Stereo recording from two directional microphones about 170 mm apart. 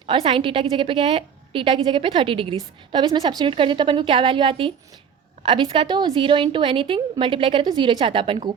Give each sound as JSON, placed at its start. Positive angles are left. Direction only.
{"t": 0.1, "sound": "a woman's voice", "side_deg": -30}